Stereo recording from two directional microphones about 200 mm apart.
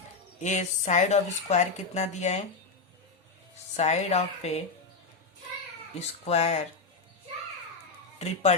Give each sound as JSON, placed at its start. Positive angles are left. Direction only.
{"t": 0.4, "sound": "speech", "side_deg": 35}
{"t": 3.8, "sound": "speech", "side_deg": 35}
{"t": 6.0, "sound": "speech", "side_deg": 30}
{"t": 8.2, "sound": "speech", "side_deg": 30}